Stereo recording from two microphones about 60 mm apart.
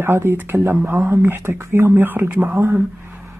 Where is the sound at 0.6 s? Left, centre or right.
Right.